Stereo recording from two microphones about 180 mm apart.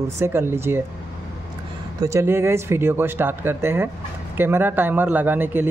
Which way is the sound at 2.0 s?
15° right (ahead or behind).